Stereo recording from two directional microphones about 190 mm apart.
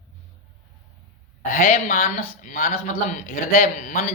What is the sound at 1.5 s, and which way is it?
Speech, 50° left (ahead or behind).